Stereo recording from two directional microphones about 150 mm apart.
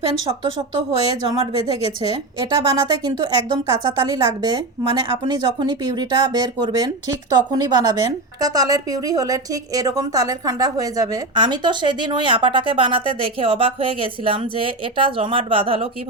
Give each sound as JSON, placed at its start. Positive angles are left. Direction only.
{"t": 1.5, "sound": "speech", "side_deg": 40}
{"t": 2.5, "sound": "a woman's voice", "side_deg": -25}